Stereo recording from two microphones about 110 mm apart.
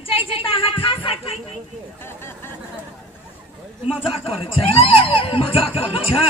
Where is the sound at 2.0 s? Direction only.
20° left (ahead or behind).